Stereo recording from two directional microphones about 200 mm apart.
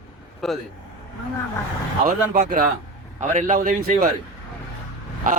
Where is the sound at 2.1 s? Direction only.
40° right (ahead or behind).